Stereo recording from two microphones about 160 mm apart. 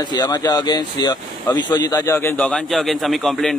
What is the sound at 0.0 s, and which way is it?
A man's voice, 25° left (ahead or behind).